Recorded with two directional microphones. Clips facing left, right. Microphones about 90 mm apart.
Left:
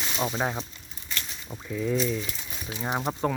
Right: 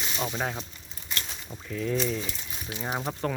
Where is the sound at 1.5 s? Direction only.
15° left (ahead or behind).